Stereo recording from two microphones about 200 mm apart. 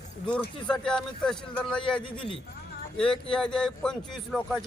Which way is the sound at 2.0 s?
25° left (ahead or behind).